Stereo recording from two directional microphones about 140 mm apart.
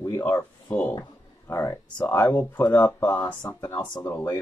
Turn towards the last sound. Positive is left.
turn(degrees=20)  # may be behind; listen again after turning